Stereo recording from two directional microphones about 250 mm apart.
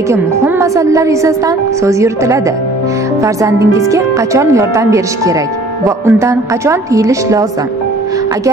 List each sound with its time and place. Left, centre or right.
0.1 s a woman's voice: centre